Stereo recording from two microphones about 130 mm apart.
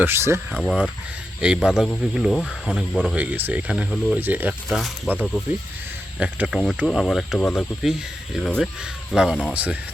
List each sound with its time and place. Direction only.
0.0 s speech: 20° right (ahead or behind)
0.5 s cricket: centre (ahead or behind)
3.0 s speech: 10° right (ahead or behind)
3.9 s cricket: centre (ahead or behind)
4.2 s speech: 15° right (ahead or behind)
6.1 s cricket: 5° right (ahead or behind)
9.1 s cricket: 5° right (ahead or behind)
9.5 s speech: 10° right (ahead or behind)